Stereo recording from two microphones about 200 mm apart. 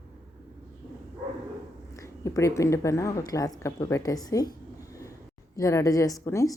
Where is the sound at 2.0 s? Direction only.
15° left (ahead or behind).